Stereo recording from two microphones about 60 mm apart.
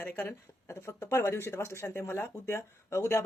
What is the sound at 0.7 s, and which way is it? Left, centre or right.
Speech, left.